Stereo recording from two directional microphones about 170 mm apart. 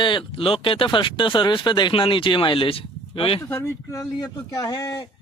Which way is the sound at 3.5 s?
15° left (ahead or behind).